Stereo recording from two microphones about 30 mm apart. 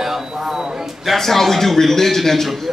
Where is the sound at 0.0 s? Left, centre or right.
Centre.